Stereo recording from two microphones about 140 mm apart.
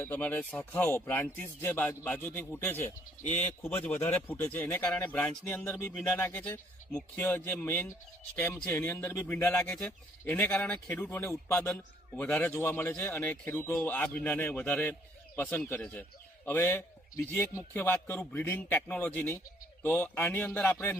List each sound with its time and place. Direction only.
0.0 s a man's voice: 15° left (ahead or behind)
5.6 s a man's voice: 20° left (ahead or behind)